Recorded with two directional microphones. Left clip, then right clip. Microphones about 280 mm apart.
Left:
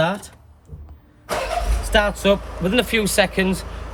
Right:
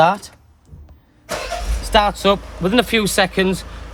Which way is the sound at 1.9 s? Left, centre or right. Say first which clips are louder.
Right 3 dB; right.